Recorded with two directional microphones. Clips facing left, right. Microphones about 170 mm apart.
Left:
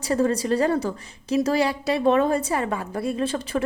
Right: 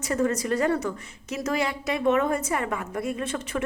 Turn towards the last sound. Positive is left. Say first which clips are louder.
# left 5 dB
turn(degrees=30)  # may be behind; listen again after turning